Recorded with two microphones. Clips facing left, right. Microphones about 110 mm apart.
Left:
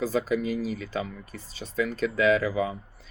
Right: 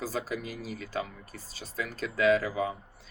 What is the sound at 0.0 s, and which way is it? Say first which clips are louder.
Speech: left 8 dB; 45° right (ahead or behind).